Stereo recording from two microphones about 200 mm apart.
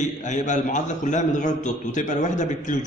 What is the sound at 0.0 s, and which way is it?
A man's voice, 35° left (ahead or behind).